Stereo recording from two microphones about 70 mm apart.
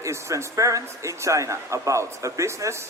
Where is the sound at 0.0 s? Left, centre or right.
Right.